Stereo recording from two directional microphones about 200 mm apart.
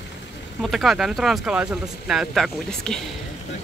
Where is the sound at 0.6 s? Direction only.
Centre (ahead or behind).